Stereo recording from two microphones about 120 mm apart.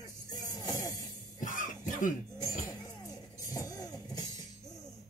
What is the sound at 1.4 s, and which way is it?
Cough, 90° left.